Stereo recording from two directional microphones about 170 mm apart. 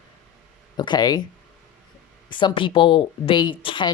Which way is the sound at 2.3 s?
30° left (ahead or behind).